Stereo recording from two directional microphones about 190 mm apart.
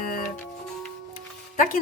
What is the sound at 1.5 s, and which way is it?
Speech, 45° left (ahead or behind).